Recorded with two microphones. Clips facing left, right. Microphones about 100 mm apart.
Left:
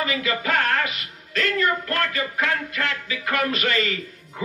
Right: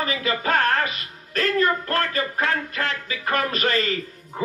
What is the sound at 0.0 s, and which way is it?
A man's voice, 40° right (ahead or behind).